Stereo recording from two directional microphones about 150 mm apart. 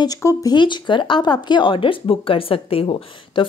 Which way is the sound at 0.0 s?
20° left (ahead or behind).